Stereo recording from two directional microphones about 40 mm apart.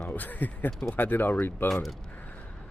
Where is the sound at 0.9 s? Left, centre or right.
Left.